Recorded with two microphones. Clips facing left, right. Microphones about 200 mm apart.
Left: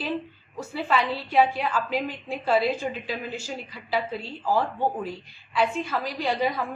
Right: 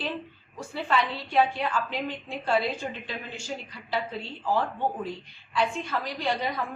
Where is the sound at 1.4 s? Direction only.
5° left (ahead or behind).